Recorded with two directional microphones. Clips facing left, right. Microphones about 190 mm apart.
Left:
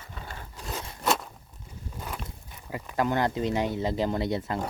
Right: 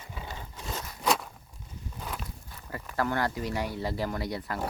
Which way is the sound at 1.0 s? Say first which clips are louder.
Left 1 dB; centre (ahead or behind).